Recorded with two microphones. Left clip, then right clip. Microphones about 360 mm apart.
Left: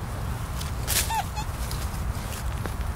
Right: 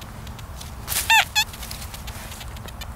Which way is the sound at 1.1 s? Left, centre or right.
Right.